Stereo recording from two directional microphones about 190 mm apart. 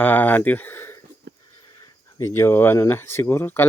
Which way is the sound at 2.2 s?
15° left (ahead or behind).